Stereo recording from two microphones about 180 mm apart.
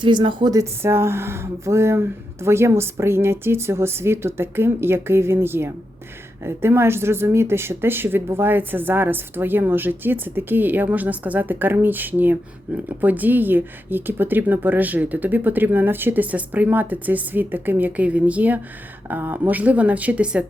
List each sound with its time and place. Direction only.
0.0 s speech: 25° right (ahead or behind); by 20.4 s 5° right (ahead or behind)